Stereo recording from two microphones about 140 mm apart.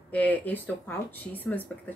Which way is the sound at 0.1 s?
10° left (ahead or behind).